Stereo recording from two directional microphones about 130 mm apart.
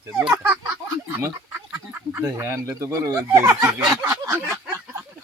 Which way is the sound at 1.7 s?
15° right (ahead or behind).